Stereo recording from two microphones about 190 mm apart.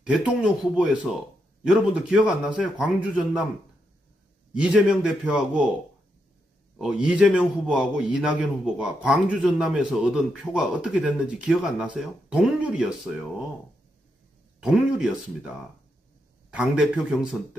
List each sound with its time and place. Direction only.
0.0 s a man's voice: 5° right (ahead or behind)
4.6 s a man's voice: 5° right (ahead or behind)
6.8 s a man's voice: 5° right (ahead or behind)
14.6 s a man's voice: 5° right (ahead or behind)